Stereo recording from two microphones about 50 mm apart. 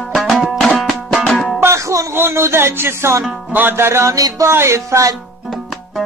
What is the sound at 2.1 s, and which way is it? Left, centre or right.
Music, right.